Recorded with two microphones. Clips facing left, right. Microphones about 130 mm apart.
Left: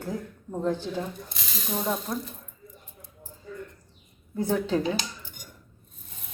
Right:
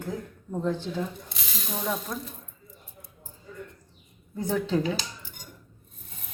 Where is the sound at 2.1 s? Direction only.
15° left (ahead or behind).